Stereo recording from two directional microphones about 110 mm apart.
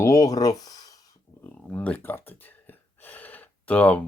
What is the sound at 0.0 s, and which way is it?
Speech, 30° left (ahead or behind).